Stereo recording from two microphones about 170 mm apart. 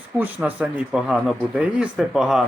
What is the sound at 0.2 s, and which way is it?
Speech, 5° right (ahead or behind).